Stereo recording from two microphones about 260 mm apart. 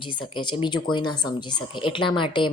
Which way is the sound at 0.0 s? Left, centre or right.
Centre.